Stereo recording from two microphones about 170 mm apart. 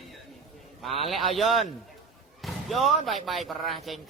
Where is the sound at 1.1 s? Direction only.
Centre (ahead or behind).